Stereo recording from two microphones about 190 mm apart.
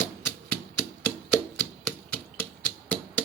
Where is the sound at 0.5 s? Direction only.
10° left (ahead or behind).